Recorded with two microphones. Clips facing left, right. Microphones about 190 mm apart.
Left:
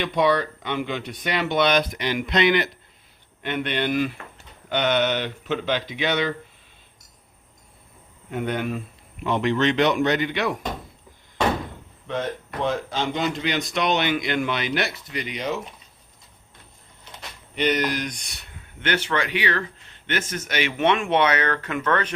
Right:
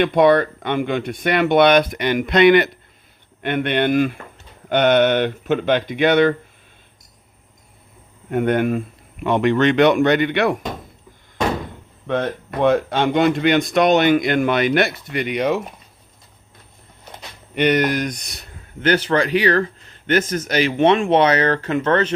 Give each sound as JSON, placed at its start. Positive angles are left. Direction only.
{"t": 0.0, "sound": "speech", "side_deg": -55}
{"t": 8.3, "sound": "speech", "side_deg": -55}
{"t": 12.0, "sound": "speech", "side_deg": -60}
{"t": 17.5, "sound": "speech", "side_deg": -60}